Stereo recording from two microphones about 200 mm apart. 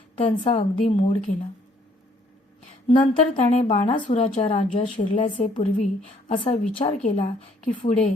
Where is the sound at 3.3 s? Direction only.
35° left (ahead or behind).